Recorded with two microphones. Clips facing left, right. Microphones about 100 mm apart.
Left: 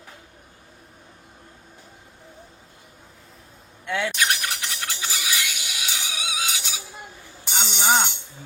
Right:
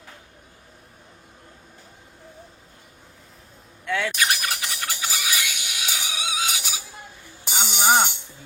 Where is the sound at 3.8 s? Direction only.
15° left (ahead or behind).